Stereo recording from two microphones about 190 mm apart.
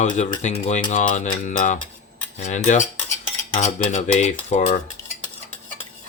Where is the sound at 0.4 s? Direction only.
35° left (ahead or behind).